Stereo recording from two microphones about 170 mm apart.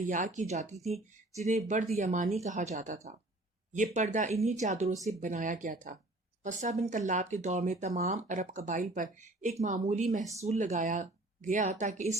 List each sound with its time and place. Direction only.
0.0 s speech: 50° right (ahead or behind)